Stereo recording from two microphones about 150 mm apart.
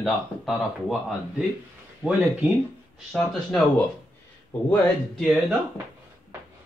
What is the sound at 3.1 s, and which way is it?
Speech, 5° left (ahead or behind).